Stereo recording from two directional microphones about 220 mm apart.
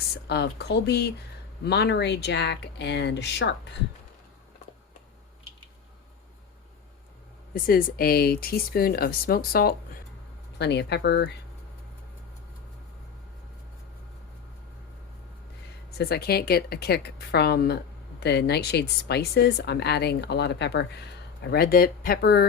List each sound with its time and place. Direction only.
0.3 s speech: 50° left (ahead or behind)
7.5 s speech: 40° left (ahead or behind)
16.0 s speech: 45° left (ahead or behind)